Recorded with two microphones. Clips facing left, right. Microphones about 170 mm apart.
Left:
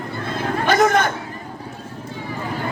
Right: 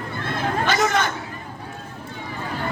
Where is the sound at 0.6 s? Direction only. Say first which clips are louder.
Left 6 dB; 50° left (ahead or behind).